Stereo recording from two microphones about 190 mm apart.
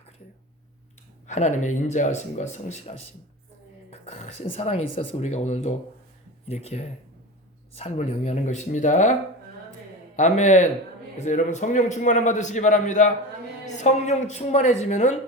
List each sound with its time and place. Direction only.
1.3 s a man's voice: 40° left (ahead or behind)
10.2 s a man's voice: 40° left (ahead or behind)